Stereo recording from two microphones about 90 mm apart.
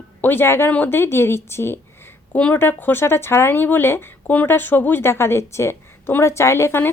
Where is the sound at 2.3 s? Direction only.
15° left (ahead or behind).